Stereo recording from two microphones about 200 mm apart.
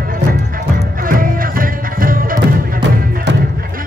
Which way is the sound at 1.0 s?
45° right (ahead or behind).